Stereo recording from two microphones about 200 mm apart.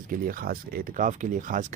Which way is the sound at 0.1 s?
45° right (ahead or behind).